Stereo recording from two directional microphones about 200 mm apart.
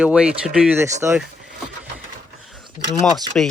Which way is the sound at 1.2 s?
5° right (ahead or behind).